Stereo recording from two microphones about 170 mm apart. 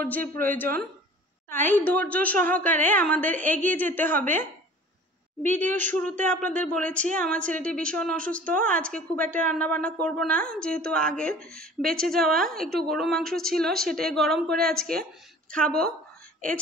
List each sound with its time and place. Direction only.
0.4 s speech: 55° right (ahead or behind)
1.5 s speech: 10° left (ahead or behind)
5.7 s speech: 50° right (ahead or behind)
6.2 s a woman's voice: 10° left (ahead or behind)